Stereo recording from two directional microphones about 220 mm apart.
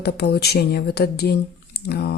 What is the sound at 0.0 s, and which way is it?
Speech, 45° left (ahead or behind).